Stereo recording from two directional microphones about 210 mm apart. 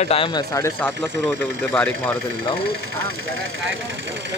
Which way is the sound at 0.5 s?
15° left (ahead or behind).